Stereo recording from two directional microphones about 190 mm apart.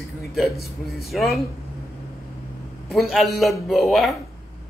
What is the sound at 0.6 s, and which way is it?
Speech, 55° left (ahead or behind).